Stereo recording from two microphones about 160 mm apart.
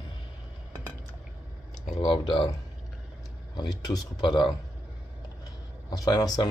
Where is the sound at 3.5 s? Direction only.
25° left (ahead or behind).